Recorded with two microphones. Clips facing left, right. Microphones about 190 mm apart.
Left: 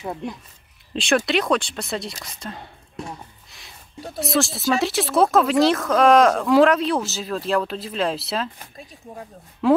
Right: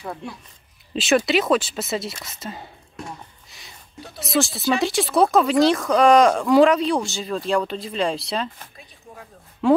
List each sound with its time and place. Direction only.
0.9 s speech: centre (ahead or behind)
4.2 s speech: centre (ahead or behind)